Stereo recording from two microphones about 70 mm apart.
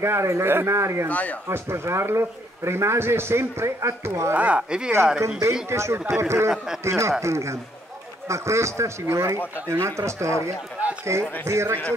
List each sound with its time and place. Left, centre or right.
0.0 s a man's voice: right
1.0 s speech: left
1.5 s a man's voice: right
4.4 s speech: centre
5.7 s a man's voice: right
10.8 s a sound: right
11.4 s speech: right